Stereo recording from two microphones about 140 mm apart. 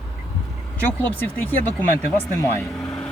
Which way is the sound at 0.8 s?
10° left (ahead or behind).